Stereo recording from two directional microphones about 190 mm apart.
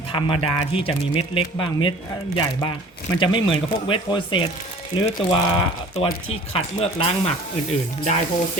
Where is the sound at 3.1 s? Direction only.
25° left (ahead or behind).